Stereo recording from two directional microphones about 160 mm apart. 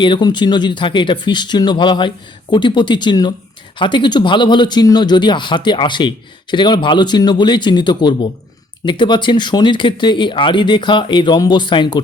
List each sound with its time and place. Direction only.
0.0 s speech: 30° left (ahead or behind)